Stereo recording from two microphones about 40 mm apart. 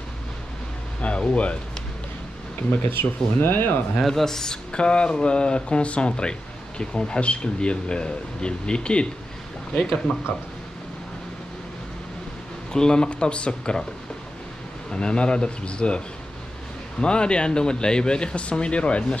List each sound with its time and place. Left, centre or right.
1.3 s speech: left
2.7 s speech: left
4.0 s speech: centre
4.7 s speech: left
10.3 s speech: left
12.7 s speech: centre
14.9 s speech: left
17.0 s speech: left